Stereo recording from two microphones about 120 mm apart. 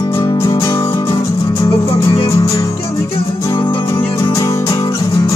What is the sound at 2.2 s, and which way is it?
Music, 25° left (ahead or behind).